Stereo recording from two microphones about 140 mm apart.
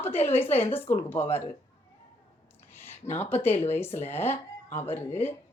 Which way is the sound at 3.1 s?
15° left (ahead or behind).